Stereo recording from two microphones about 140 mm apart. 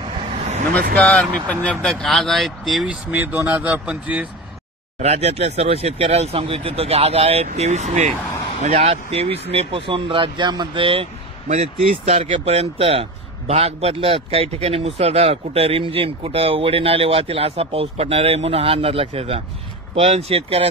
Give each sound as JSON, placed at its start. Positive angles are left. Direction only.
{"t": 0.9, "sound": "speech", "side_deg": 10}
{"t": 5.0, "sound": "a man's voice", "side_deg": -50}